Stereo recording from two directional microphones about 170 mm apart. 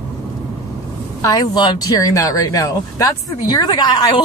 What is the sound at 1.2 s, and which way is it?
Speech, 20° left (ahead or behind).